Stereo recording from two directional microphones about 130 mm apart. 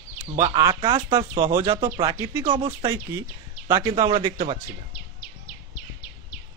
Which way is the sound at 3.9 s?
45° right (ahead or behind).